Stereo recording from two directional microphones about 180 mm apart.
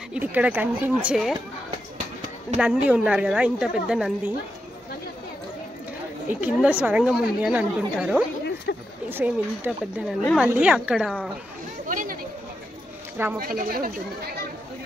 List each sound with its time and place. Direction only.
0.1 s speech: 10° right (ahead or behind)
2.5 s a woman's voice: 5° right (ahead or behind)
6.2 s a woman's voice: 10° right (ahead or behind)
8.7 s a sound: 75° left (ahead or behind)
9.1 s a woman's voice: 10° right (ahead or behind)
11.9 s chatter: 45° right (ahead or behind)
13.4 s speech: 55° right (ahead or behind)